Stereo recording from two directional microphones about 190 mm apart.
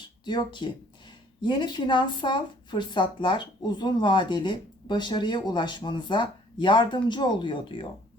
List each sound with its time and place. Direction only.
0.3 s speech: 25° left (ahead or behind)